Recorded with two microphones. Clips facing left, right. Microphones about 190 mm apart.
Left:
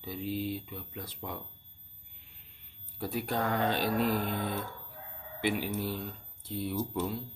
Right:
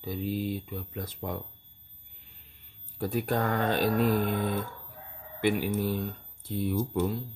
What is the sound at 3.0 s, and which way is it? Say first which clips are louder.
Speech: right 4 dB; 45° right (ahead or behind).